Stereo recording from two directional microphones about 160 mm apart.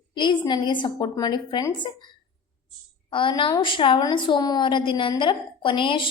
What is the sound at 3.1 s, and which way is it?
A woman's voice, 30° left (ahead or behind).